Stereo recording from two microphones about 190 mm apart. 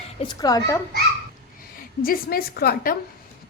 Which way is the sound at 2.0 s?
50° left (ahead or behind).